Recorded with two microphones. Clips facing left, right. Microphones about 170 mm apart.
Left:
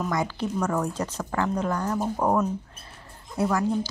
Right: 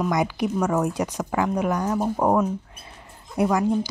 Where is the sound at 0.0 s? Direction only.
15° right (ahead or behind).